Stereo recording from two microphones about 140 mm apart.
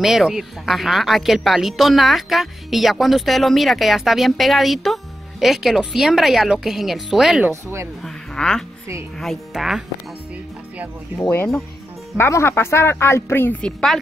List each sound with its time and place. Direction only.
0.0 s speech: centre (ahead or behind)
7.4 s speech: 20° right (ahead or behind)
8.0 s speech: 5° left (ahead or behind)
11.1 s a woman's voice: 15° left (ahead or behind)